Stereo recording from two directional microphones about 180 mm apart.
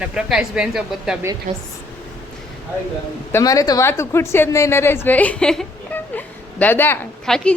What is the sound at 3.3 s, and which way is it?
A woman's voice, 20° left (ahead or behind).